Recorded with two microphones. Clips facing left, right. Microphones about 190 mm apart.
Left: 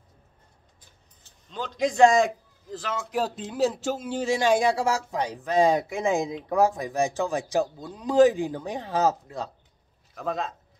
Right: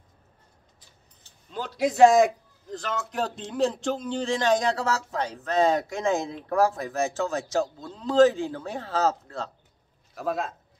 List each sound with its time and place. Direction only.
1.5 s a man's voice: 5° right (ahead or behind); by 9.5 s 15° left (ahead or behind)
10.1 s a man's voice: 5° right (ahead or behind)